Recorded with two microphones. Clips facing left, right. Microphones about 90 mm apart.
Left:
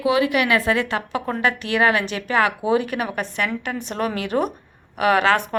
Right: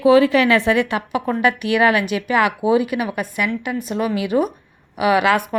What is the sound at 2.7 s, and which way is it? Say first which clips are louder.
Speech: right 3 dB; 40° left (ahead or behind).